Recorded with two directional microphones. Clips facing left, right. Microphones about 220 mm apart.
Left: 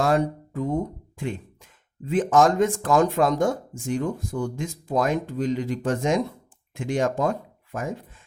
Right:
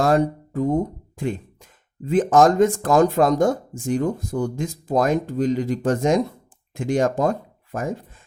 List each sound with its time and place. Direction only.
0.0 s speech: 40° right (ahead or behind)